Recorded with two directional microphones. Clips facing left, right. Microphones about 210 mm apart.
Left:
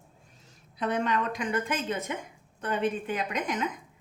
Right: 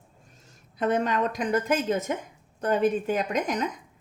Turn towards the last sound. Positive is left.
turn(degrees=-40)  # may be behind; listen again after turning